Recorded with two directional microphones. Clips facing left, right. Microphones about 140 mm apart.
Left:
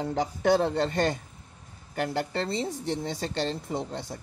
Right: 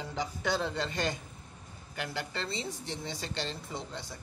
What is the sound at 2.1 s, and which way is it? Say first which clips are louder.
Speech: left 7 dB; 50° left (ahead or behind).